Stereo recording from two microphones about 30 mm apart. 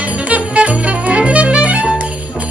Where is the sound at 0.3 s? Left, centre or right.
Right.